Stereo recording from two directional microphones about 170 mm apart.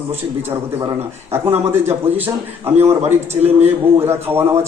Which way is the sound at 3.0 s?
35° right (ahead or behind).